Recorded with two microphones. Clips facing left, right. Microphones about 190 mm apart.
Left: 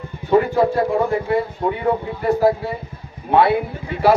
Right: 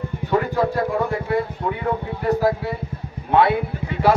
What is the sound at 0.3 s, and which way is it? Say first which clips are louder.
Speech: left 5 dB; 15° left (ahead or behind).